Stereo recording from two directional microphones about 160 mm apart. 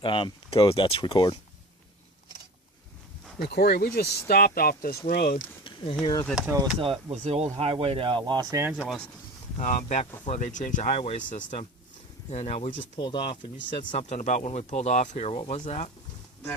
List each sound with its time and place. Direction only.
0.0 s speech: 30° left (ahead or behind)
3.3 s speech: 90° left; by 5.4 s 65° left (ahead or behind)
5.6 s speech: 35° left (ahead or behind)
6.2 s speech: 5° right (ahead or behind)
6.7 s speech: 35° right (ahead or behind)
8.7 s speech: 5° right (ahead or behind)
9.6 s speech: 45° left (ahead or behind); by 13.8 s 30° left (ahead or behind)
13.9 s speech: 50° left (ahead or behind)